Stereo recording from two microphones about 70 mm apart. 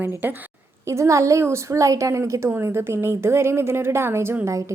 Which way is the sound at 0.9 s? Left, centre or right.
Right.